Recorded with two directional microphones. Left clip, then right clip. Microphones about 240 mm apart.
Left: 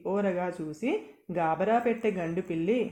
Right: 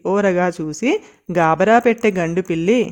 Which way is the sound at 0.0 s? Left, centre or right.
Right.